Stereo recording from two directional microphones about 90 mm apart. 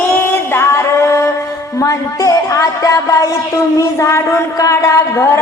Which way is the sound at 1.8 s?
40° left (ahead or behind).